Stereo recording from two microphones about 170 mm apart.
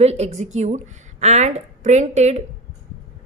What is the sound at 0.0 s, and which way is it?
A woman's voice, 40° right (ahead or behind).